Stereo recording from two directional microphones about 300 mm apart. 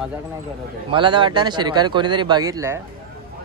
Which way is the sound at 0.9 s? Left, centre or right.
Centre.